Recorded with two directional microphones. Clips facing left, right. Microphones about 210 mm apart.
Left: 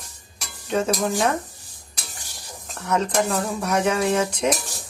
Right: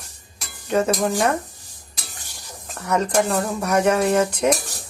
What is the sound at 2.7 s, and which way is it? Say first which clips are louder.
Speech: right 2 dB; 10° right (ahead or behind).